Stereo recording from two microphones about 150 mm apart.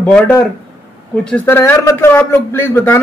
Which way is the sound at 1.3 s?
15° left (ahead or behind).